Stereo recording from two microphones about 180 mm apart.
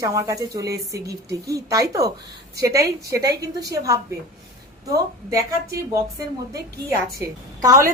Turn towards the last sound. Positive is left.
turn(degrees=-20)  # may be behind; listen again after turning